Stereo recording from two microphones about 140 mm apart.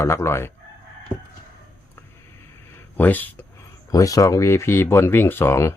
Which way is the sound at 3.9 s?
25° left (ahead or behind).